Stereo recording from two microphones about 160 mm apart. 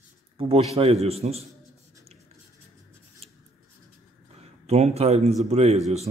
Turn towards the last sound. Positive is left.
turn(degrees=-40)  # may be behind; listen again after turning